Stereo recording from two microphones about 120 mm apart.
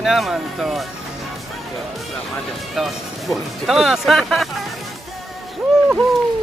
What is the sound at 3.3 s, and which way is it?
Speech, centre (ahead or behind).